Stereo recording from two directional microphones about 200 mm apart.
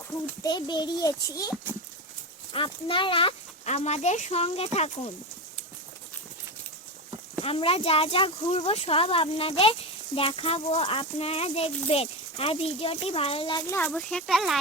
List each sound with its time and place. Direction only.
0.4 s speech: 20° left (ahead or behind)
7.4 s speech: 30° left (ahead or behind); by 14.6 s centre (ahead or behind)